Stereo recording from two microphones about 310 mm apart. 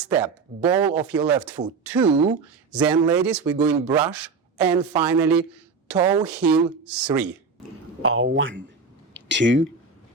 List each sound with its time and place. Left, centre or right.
0.1 s a man's voice: centre
3.2 s a man's voice: centre
8.0 s speech: right